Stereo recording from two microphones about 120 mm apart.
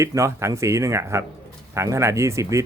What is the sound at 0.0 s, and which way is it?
Speech, 25° right (ahead or behind).